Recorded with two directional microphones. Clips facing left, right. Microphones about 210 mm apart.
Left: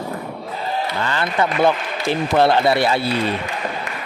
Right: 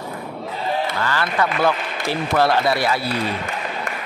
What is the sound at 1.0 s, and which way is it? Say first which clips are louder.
A man's voice: left 1 dB; 20° left (ahead or behind).